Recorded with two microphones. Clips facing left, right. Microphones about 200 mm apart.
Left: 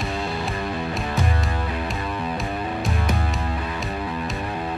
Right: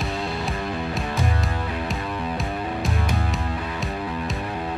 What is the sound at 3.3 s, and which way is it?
Music, centre (ahead or behind).